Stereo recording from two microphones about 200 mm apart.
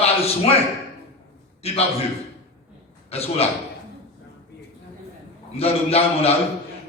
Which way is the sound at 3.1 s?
30° left (ahead or behind).